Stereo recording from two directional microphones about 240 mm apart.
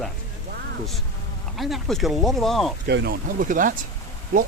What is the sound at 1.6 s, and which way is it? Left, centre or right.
Speech, centre.